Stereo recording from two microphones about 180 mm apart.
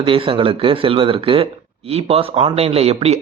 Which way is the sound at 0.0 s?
30° right (ahead or behind).